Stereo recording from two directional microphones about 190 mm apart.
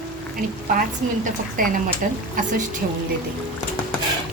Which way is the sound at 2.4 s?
45° right (ahead or behind).